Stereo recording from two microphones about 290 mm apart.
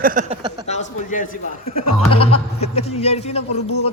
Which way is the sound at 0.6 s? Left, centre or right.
Left.